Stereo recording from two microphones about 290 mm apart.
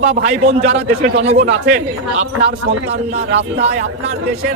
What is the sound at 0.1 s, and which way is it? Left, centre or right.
Speech, right.